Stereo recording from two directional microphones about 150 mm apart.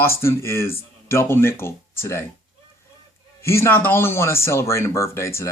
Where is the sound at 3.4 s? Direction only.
15° left (ahead or behind).